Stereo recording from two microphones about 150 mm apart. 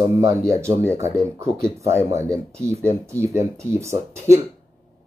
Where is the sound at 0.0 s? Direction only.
20° right (ahead or behind).